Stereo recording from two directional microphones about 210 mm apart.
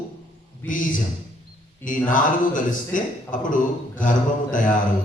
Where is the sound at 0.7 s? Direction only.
40° left (ahead or behind).